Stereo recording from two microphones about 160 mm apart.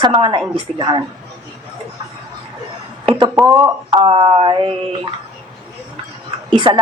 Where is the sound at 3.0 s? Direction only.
30° right (ahead or behind).